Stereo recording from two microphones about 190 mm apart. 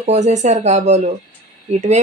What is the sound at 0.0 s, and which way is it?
Speech, 35° right (ahead or behind).